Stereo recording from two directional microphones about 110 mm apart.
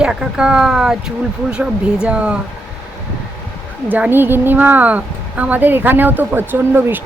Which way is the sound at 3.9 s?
15° right (ahead or behind).